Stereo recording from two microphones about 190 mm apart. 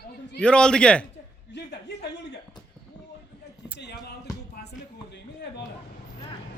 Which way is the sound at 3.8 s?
65° left (ahead or behind).